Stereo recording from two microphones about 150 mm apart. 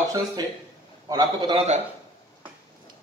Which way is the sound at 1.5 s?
50° right (ahead or behind).